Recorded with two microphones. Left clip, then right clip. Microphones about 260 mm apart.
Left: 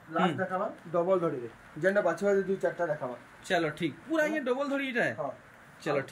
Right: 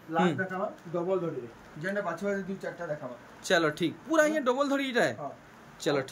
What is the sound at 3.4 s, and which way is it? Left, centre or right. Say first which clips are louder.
Speech: right 3 dB; centre.